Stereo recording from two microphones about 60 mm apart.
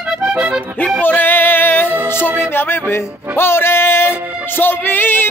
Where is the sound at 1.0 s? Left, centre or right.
Left.